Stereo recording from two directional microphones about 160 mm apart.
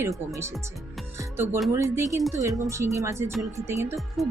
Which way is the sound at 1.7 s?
20° right (ahead or behind).